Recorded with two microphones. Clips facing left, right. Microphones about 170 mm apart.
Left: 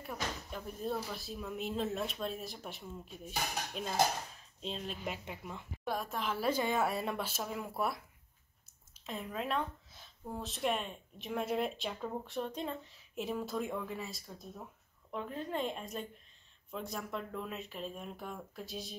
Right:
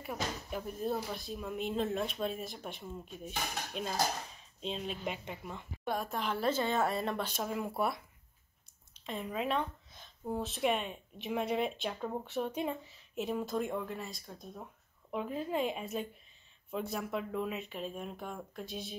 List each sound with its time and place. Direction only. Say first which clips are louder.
0.0 s speech: right 2 dB; 10° right (ahead or behind)
9.0 s speech: right 3 dB; centre (ahead or behind)
15.0 s a woman's voice: right 3 dB; 10° right (ahead or behind)